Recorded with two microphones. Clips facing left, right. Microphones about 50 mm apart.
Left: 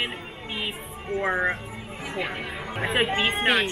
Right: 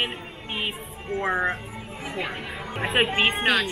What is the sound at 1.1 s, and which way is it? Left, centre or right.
A woman's voice, centre.